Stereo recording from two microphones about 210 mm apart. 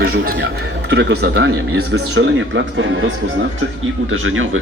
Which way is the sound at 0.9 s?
55° right (ahead or behind).